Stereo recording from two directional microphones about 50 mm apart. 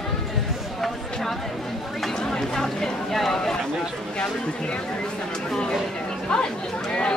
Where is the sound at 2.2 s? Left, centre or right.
Centre.